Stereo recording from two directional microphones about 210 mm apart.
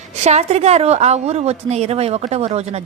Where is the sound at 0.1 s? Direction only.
30° right (ahead or behind).